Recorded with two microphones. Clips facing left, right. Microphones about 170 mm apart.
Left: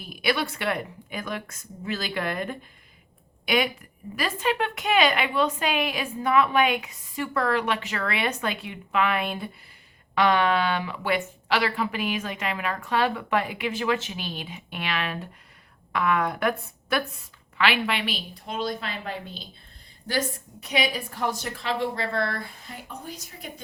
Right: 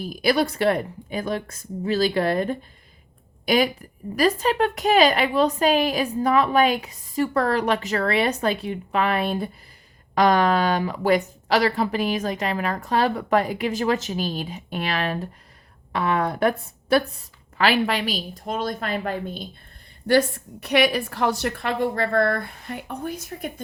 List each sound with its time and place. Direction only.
0.0 s a woman's voice: 35° right (ahead or behind)
20.1 s a woman's voice: 65° right (ahead or behind)